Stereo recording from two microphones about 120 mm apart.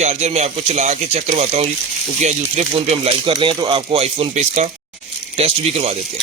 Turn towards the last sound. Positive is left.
turn(degrees=-60)  # may be behind; listen again after turning